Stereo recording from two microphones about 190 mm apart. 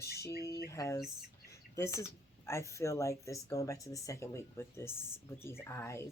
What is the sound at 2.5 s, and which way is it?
Speech, 15° left (ahead or behind).